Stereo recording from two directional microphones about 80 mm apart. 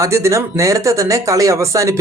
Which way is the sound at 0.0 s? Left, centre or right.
Right.